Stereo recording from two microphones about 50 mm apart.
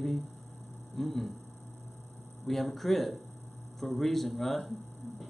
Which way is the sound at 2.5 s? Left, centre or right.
Centre.